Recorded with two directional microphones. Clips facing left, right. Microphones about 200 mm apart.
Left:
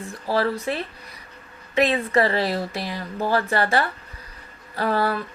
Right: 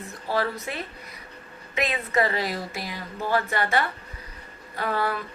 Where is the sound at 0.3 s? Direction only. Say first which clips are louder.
Left 5 dB; 35° left (ahead or behind).